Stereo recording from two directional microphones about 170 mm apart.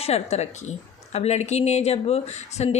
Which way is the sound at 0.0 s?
40° left (ahead or behind).